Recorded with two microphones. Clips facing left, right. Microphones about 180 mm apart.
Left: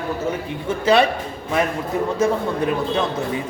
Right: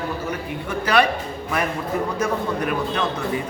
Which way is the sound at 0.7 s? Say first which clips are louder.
Left 3 dB; 25° left (ahead or behind).